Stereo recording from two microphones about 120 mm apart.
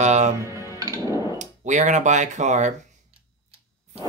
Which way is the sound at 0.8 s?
30° right (ahead or behind).